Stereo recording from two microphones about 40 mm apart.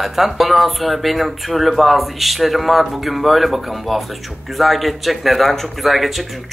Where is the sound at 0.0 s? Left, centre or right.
Centre.